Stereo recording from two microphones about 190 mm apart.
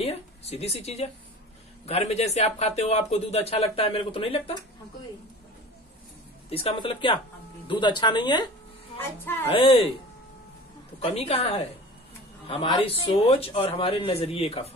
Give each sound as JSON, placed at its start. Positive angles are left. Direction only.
{"t": 0.0, "sound": "speech", "side_deg": 35}
{"t": 6.5, "sound": "speech", "side_deg": 30}
{"t": 9.0, "sound": "a woman's voice", "side_deg": 10}
{"t": 9.5, "sound": "speech", "side_deg": 30}
{"t": 11.0, "sound": "a man's voice", "side_deg": 30}